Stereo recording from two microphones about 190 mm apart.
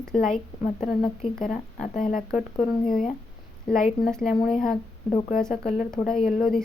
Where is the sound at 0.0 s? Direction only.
5° left (ahead or behind).